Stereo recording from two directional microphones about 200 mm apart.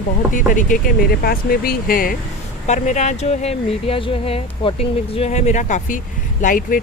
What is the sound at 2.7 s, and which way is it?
Speech, 35° left (ahead or behind).